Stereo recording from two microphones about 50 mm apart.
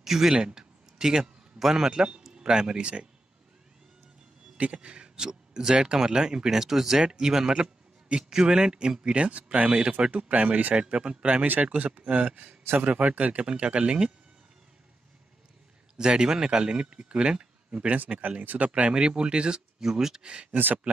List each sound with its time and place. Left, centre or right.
0.0 s a man's voice: centre
0.6 s a sound: centre
2.3 s speech: centre
4.7 s speech: centre
7.5 s a sound: right
8.2 s speech: centre
11.4 s speech: right
16.0 s speech: centre; by 18.7 s right
18.7 s speech: right
20.5 s speech: right